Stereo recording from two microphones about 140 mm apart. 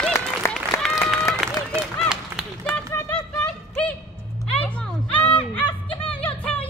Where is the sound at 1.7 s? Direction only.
5° right (ahead or behind).